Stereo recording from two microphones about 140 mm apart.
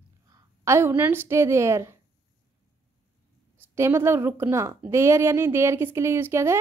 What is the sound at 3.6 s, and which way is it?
Speech, 15° right (ahead or behind).